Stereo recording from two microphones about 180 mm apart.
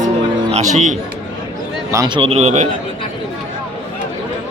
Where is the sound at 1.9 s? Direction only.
20° right (ahead or behind); by 2.6 s 40° right (ahead or behind).